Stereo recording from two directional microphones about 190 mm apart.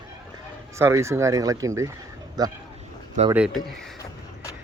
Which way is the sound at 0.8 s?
15° right (ahead or behind).